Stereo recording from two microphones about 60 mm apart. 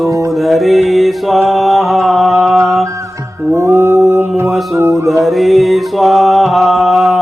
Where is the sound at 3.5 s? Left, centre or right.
Right.